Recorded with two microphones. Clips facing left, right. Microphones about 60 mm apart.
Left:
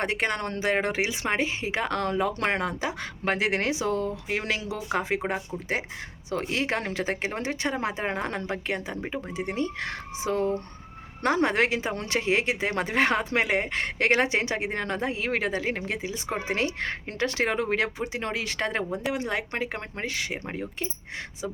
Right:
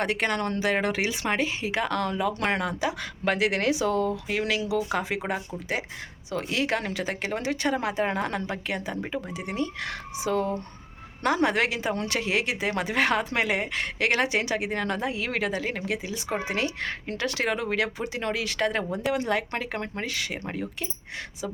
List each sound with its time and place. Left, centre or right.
0.0 s a woman's voice: left